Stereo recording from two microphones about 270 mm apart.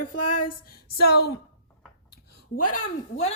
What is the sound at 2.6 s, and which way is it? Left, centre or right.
Speech, left.